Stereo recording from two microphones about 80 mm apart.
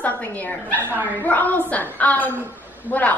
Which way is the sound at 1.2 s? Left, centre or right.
Left.